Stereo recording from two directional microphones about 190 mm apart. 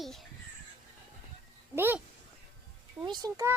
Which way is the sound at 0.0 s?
Centre (ahead or behind).